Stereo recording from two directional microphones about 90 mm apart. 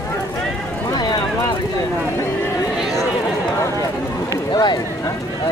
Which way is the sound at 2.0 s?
30° left (ahead or behind).